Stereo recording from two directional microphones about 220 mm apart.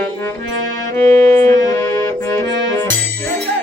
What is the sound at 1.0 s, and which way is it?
Music, 10° left (ahead or behind).